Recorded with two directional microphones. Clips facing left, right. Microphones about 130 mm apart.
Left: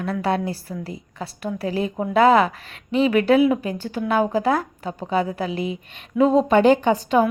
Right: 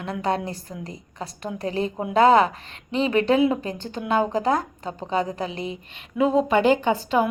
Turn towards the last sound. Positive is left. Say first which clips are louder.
# left 3 dB
turn(degrees=-15)  # may be behind; listen again after turning